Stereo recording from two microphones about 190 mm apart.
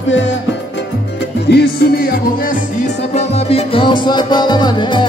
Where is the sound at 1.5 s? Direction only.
55° left (ahead or behind).